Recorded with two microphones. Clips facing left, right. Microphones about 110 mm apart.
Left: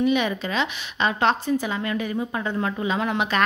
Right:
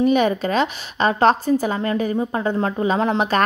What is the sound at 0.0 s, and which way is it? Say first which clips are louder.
A woman's voice: right 5 dB; 40° right (ahead or behind).